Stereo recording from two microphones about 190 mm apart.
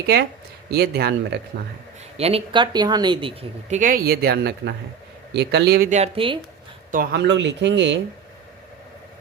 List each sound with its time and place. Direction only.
0.7 s speech: 55° right (ahead or behind)
2.1 s speech: 30° right (ahead or behind)
3.8 s speech: 45° right (ahead or behind)
5.9 s speech: 30° right (ahead or behind)
6.9 s speech: 55° right (ahead or behind)